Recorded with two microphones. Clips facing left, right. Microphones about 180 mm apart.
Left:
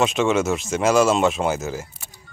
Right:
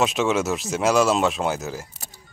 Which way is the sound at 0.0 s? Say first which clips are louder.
Left 2 dB; centre (ahead or behind).